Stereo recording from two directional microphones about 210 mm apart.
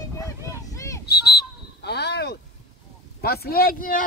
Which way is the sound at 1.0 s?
50° left (ahead or behind).